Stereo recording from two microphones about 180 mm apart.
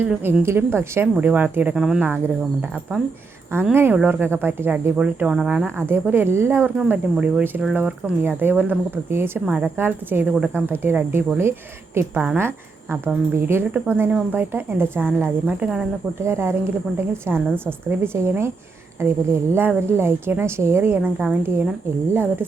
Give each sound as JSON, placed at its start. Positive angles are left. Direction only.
{"t": 0.0, "sound": "speech", "side_deg": -10}